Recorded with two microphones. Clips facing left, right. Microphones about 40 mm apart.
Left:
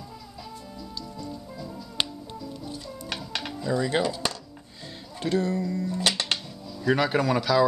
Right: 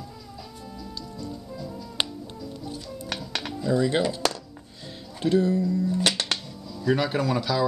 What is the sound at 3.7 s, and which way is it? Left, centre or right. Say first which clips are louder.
Speech: right 2 dB; centre.